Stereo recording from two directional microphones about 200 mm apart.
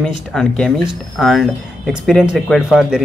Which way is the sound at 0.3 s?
Centre (ahead or behind).